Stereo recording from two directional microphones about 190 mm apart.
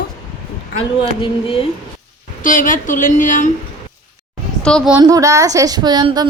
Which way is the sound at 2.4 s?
45° left (ahead or behind).